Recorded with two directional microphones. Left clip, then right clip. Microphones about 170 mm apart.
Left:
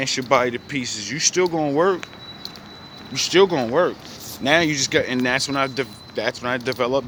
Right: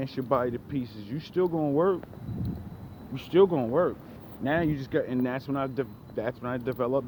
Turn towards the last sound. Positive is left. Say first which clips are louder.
# left 7 dB
turn(degrees=25)  # may be behind; listen again after turning